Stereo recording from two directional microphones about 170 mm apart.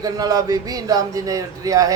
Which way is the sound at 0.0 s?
20° right (ahead or behind).